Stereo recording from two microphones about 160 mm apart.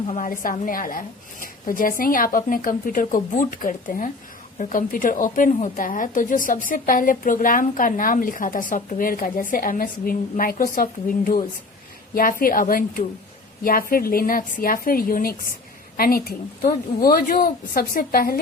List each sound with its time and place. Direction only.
0.1 s a woman's voice: 55° left (ahead or behind)